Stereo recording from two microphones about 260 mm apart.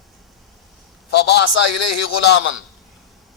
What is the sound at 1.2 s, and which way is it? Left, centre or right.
A man's voice, left.